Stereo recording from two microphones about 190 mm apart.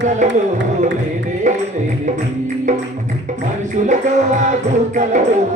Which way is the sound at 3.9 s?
40° right (ahead or behind).